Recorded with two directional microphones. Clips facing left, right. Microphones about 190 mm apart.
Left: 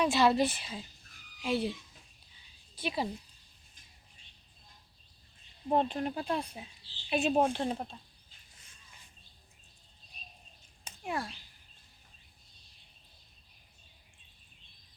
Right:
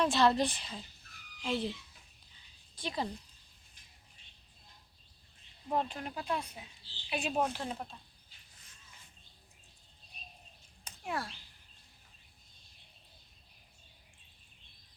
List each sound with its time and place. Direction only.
0.0 s a woman's voice: 5° left (ahead or behind)
2.7 s a woman's voice: 10° left (ahead or behind)
5.6 s speech: 25° left (ahead or behind)
10.8 s a sound: 10° left (ahead or behind)